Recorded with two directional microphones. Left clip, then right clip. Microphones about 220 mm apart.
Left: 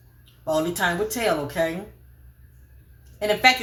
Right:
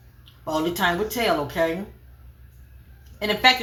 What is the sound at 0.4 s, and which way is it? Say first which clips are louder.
Speech: even; 20° left (ahead or behind).